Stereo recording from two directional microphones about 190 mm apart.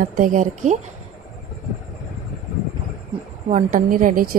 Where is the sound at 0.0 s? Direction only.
45° right (ahead or behind).